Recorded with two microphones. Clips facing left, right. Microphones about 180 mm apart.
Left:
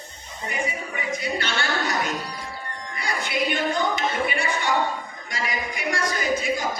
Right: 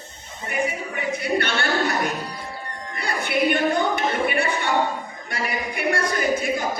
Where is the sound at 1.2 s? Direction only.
60° right (ahead or behind).